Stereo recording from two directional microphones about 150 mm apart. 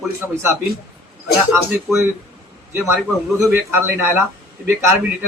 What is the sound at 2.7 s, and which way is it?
A man's voice, 15° right (ahead or behind).